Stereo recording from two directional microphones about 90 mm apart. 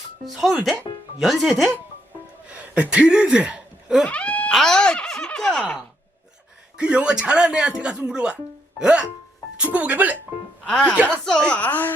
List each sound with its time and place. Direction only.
0.3 s speech: centre (ahead or behind)
2.7 s speech: 15° right (ahead or behind)
4.1 s a sound: 15° left (ahead or behind)
4.5 s speech: 5° left (ahead or behind)
6.7 s speech: 10° right (ahead or behind)
10.7 s speech: 10° left (ahead or behind)